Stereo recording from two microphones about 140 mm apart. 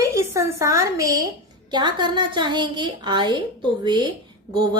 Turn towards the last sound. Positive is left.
turn(degrees=-30)  # may be behind; listen again after turning